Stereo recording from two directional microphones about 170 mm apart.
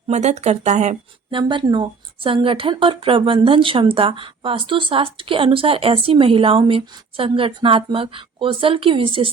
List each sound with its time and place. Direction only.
0.1 s speech: 40° right (ahead or behind)
1.3 s speech: 30° right (ahead or behind)